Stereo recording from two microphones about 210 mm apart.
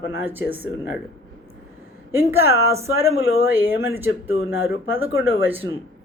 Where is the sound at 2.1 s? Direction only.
10° right (ahead or behind).